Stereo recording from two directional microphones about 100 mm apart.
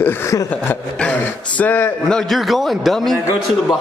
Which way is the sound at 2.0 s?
5° left (ahead or behind).